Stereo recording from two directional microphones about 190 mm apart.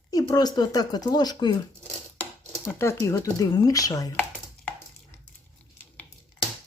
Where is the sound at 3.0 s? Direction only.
15° left (ahead or behind).